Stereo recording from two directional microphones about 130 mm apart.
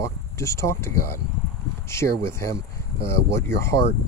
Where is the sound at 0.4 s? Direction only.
20° left (ahead or behind).